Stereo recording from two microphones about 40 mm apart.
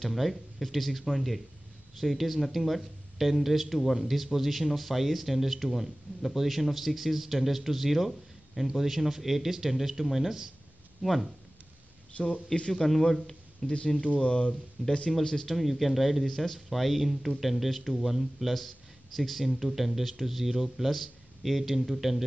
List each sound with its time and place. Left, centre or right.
0.0 s a man's voice: centre
12.2 s a man's voice: left
12.7 s speech: centre
13.8 s speech: left
14.8 s speech: centre
15.5 s speech: centre